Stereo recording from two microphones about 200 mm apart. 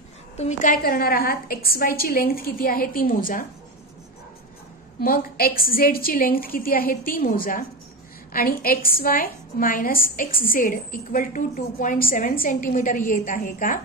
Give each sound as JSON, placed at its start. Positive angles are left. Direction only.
{"t": 0.4, "sound": "a woman's voice", "side_deg": 40}
{"t": 5.0, "sound": "a woman's voice", "side_deg": 45}